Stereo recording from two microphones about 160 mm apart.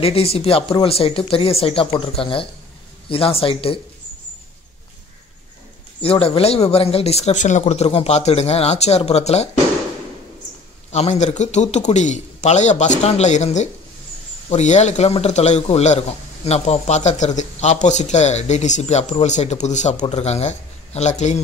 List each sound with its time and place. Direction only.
0.0 s speech: 40° left (ahead or behind)
5.9 s speech: 35° left (ahead or behind)
10.9 s speech: 45° left (ahead or behind)